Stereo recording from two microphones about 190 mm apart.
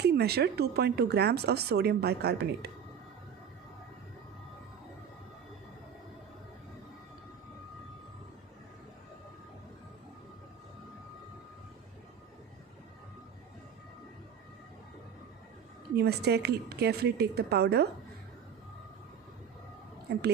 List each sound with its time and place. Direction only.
0.0 s speech: 60° right (ahead or behind)
16.0 s speech: 60° right (ahead or behind)
20.1 s speech: 60° right (ahead or behind)